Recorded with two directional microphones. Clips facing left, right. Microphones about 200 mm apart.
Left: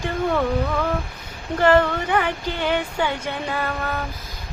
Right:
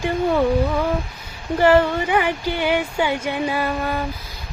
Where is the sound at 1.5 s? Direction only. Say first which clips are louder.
Right 2 dB; 10° right (ahead or behind).